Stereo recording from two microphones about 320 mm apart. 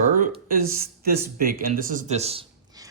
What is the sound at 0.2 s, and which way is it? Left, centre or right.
Speech, right.